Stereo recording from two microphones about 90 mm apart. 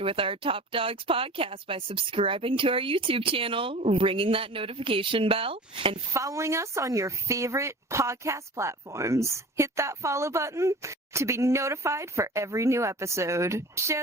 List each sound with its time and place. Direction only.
0.0 s a woman's voice: 80° right
6.1 s speech: 35° right (ahead or behind)